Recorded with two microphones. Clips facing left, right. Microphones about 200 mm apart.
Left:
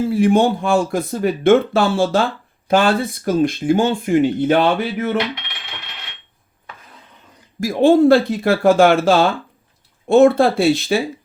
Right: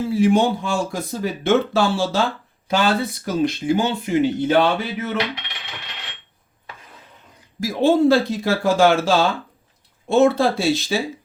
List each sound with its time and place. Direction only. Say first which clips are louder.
0.1 s speech: left 1 dB; 55° left (ahead or behind)
7.6 s speech: left 4 dB; 50° left (ahead or behind)